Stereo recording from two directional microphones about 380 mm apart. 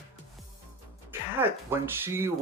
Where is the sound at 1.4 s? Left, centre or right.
Centre.